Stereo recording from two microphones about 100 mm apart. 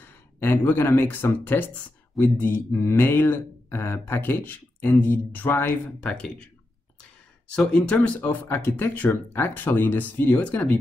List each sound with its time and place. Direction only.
0.0 s speech: 20° left (ahead or behind)
7.5 s speech: 10° left (ahead or behind)